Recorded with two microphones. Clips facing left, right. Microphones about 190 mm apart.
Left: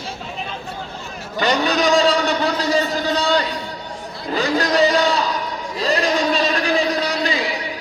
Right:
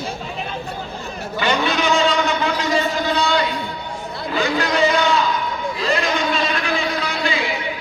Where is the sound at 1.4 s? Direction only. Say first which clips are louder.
Left 2 dB; 40° left (ahead or behind).